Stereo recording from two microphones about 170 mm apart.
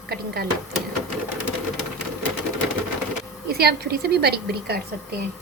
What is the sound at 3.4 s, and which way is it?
A woman's voice, 70° right (ahead or behind).